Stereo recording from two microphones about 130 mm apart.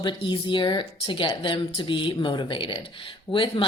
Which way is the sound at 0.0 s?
40° left (ahead or behind).